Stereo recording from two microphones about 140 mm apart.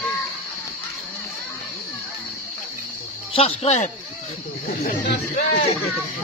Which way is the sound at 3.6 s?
50° left (ahead or behind).